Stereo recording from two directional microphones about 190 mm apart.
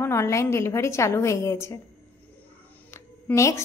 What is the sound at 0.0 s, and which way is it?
A woman's voice, 15° left (ahead or behind).